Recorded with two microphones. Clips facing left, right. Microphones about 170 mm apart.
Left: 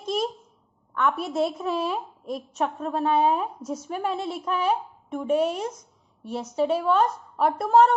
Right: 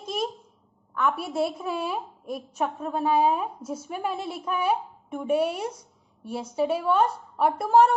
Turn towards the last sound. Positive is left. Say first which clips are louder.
# left 1 dB
turn(degrees=-5)  # may be behind; listen again after turning